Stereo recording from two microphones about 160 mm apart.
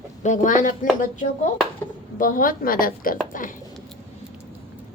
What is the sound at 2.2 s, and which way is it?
A woman's voice, 60° left (ahead or behind).